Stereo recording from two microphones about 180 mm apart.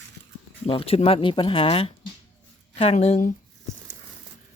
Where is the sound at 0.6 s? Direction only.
30° left (ahead or behind).